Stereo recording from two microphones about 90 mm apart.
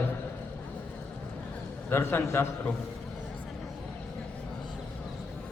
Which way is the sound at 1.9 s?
25° left (ahead or behind).